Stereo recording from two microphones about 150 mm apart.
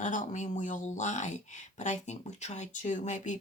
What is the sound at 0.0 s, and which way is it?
Speech, 60° left (ahead or behind).